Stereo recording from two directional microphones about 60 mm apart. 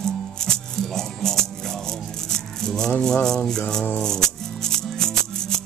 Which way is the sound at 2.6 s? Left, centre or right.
Centre.